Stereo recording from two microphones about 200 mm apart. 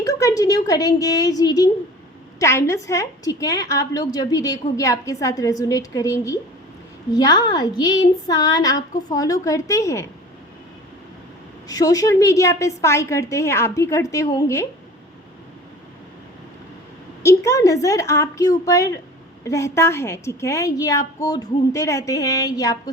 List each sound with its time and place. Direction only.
0.0 s a woman's voice: 15° left (ahead or behind)
11.7 s a woman's voice: 15° left (ahead or behind)
17.2 s a woman's voice: 15° left (ahead or behind)